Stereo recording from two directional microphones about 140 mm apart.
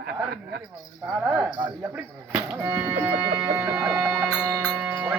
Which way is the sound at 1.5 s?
30° right (ahead or behind).